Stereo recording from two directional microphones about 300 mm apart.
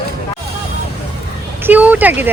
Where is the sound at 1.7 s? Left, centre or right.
Centre.